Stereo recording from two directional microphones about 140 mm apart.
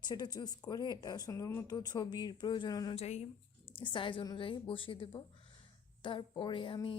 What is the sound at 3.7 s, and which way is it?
A woman's voice, 35° left (ahead or behind).